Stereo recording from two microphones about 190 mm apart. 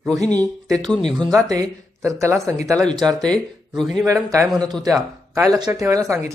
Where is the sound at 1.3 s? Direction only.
15° right (ahead or behind).